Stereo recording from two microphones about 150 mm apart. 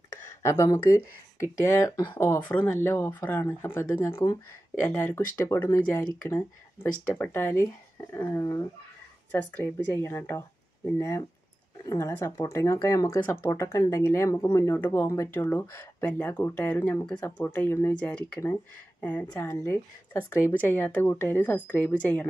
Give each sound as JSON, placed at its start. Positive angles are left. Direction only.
{"t": 0.4, "sound": "speech", "side_deg": 20}
{"t": 2.1, "sound": "speech", "side_deg": 15}